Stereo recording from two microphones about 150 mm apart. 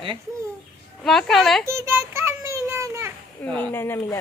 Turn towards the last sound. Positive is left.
turn(degrees=15)  # may be behind; listen again after turning